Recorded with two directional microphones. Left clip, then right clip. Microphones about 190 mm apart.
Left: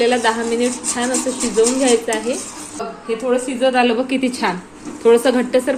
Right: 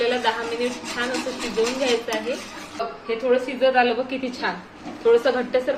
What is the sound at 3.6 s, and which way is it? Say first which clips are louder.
A woman's voice: left 5 dB; 50° left (ahead or behind).